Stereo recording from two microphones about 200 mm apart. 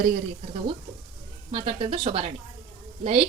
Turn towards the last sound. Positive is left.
turn(degrees=-30)  # may be behind; listen again after turning